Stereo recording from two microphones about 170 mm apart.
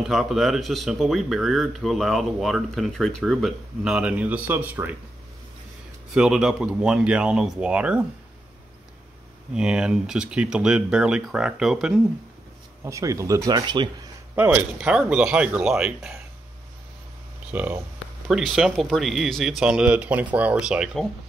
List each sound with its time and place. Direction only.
0.0 s speech: centre (ahead or behind)
6.1 s speech: 5° right (ahead or behind)
9.5 s speech: 5° right (ahead or behind)
12.8 s speech: 20° right (ahead or behind)
14.3 s speech: 10° right (ahead or behind)
17.5 s speech: 10° right (ahead or behind)